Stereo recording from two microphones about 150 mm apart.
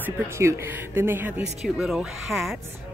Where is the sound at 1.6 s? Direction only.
Centre (ahead or behind).